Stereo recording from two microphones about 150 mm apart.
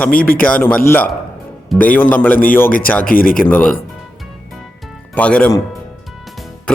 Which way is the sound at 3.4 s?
10° left (ahead or behind).